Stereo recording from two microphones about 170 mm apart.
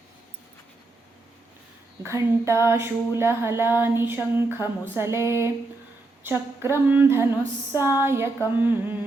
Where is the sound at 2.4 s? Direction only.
15° right (ahead or behind).